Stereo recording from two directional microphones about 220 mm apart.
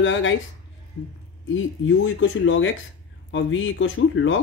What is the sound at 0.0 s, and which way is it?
Speech, 60° left (ahead or behind).